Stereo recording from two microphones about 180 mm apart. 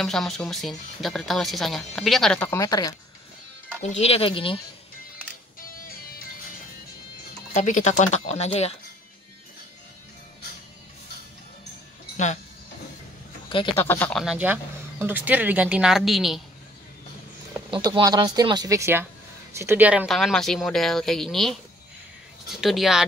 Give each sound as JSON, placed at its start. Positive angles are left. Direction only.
{"t": 0.0, "sound": "speech", "side_deg": 0}
{"t": 3.8, "sound": "speech", "side_deg": 35}
{"t": 5.6, "sound": "music", "side_deg": 55}
{"t": 7.5, "sound": "speech", "side_deg": 40}
{"t": 13.5, "sound": "speech", "side_deg": 25}
{"t": 13.8, "sound": "speech", "side_deg": 10}
{"t": 17.6, "sound": "speech", "side_deg": -30}